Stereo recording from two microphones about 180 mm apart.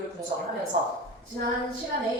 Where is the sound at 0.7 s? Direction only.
40° right (ahead or behind).